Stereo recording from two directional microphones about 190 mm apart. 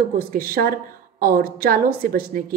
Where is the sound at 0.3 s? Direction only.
50° right (ahead or behind).